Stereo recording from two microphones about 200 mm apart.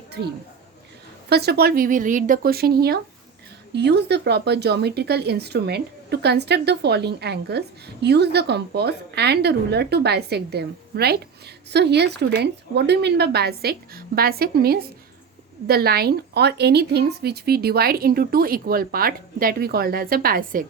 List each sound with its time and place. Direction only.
0.2 s a woman's voice: 60° right (ahead or behind)